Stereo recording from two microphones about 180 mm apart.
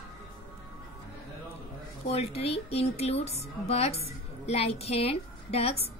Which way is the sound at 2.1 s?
35° left (ahead or behind).